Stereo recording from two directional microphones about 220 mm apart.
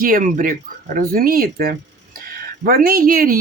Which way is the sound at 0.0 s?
40° right (ahead or behind).